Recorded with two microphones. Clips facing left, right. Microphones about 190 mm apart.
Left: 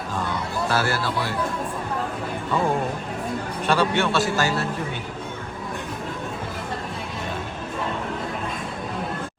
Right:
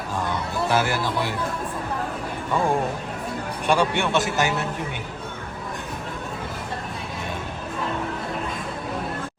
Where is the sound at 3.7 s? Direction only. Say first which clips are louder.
Even; 15° right (ahead or behind).